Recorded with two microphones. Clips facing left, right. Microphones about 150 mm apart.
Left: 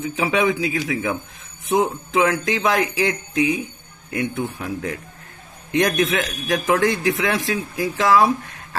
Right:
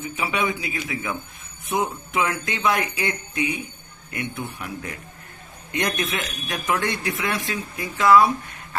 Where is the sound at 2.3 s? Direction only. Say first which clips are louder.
Left 4 dB; 90° left.